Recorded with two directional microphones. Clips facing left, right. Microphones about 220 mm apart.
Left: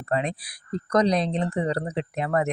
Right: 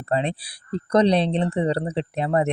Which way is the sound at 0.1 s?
30° right (ahead or behind).